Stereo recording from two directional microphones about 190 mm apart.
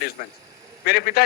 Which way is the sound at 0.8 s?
55° left (ahead or behind).